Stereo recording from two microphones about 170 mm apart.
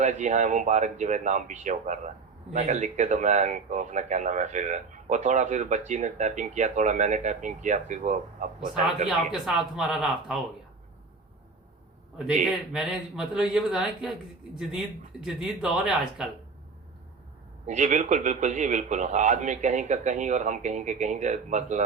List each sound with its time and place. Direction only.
0.0 s speech: 45° right (ahead or behind)
9.0 s speech: 5° right (ahead or behind)
12.7 s speech: centre (ahead or behind)
17.7 s speech: 45° right (ahead or behind)